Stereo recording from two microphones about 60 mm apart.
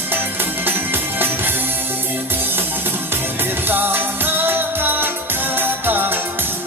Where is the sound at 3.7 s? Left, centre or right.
Right.